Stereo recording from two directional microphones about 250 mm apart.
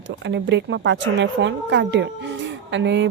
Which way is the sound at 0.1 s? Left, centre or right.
Right.